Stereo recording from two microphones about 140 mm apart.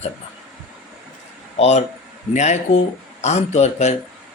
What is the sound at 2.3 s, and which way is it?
Speech, 55° left (ahead or behind).